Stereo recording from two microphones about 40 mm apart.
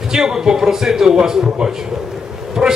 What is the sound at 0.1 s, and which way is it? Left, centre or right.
A man's voice, centre.